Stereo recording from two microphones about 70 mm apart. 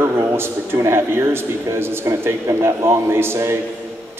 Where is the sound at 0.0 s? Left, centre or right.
Right.